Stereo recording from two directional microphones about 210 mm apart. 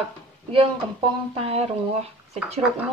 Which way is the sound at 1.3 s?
25° right (ahead or behind).